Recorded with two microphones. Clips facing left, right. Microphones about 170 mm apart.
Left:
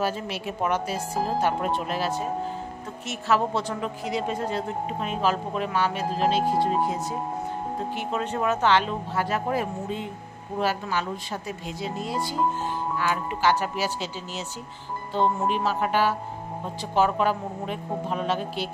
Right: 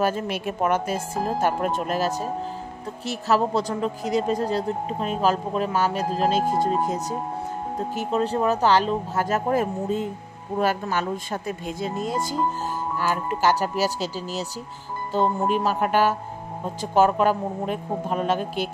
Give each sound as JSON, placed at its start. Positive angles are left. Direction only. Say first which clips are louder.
{"t": 0.0, "sound": "speech", "louder": "right 4 dB", "side_deg": -50}
{"t": 7.9, "sound": "speech", "louder": "right 8 dB", "side_deg": -35}